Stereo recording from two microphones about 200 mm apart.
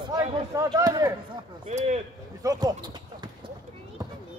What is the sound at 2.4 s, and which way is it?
Speech, 15° right (ahead or behind).